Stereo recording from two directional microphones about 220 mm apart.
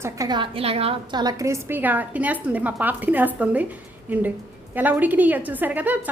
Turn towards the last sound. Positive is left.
turn(degrees=-5)  # may be behind; listen again after turning